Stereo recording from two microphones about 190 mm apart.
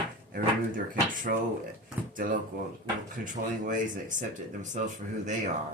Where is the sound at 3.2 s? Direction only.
40° right (ahead or behind).